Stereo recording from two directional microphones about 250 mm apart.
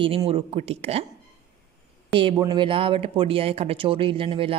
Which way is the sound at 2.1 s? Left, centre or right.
Centre.